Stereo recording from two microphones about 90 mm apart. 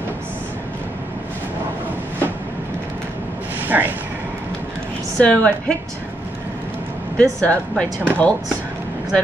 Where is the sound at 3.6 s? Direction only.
20° right (ahead or behind).